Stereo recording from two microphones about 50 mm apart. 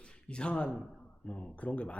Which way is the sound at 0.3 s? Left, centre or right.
Left.